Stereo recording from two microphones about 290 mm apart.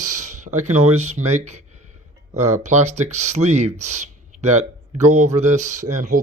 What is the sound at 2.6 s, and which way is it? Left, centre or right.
Speech, right.